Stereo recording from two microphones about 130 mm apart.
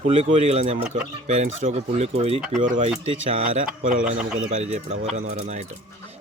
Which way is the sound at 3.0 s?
50° right (ahead or behind).